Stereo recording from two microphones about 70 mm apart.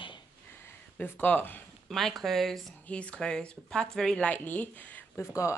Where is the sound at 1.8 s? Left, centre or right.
Centre.